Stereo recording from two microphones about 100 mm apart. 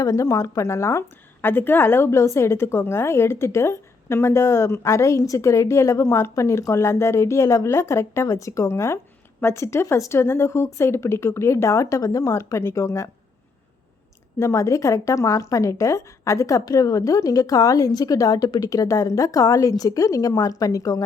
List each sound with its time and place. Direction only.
0.0 s a woman's voice: 35° left (ahead or behind)
14.3 s a woman's voice: 30° left (ahead or behind)